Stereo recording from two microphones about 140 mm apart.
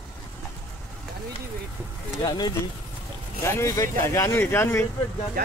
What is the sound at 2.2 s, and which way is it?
Speech, 30° left (ahead or behind).